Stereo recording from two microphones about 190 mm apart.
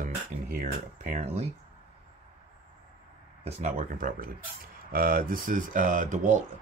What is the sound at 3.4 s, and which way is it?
Speech, 35° right (ahead or behind).